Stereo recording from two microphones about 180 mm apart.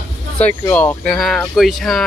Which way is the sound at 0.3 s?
10° left (ahead or behind).